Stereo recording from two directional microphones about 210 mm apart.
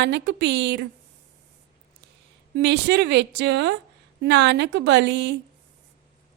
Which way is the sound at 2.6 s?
55° right (ahead or behind).